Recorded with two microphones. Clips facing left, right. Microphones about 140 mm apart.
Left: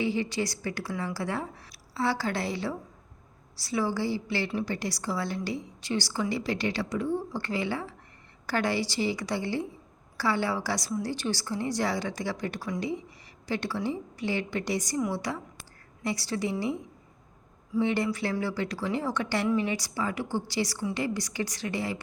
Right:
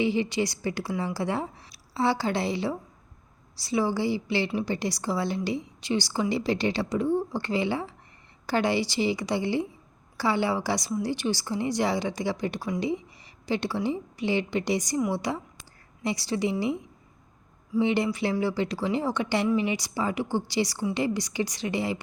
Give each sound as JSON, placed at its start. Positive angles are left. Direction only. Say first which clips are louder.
{"t": 0.0, "sound": "a woman's voice", "louder": "right 3 dB", "side_deg": -20}
{"t": 17.7, "sound": "a woman's voice", "louder": "right 2 dB", "side_deg": -20}